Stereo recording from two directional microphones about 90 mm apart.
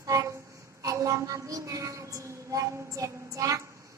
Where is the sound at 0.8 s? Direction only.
35° right (ahead or behind).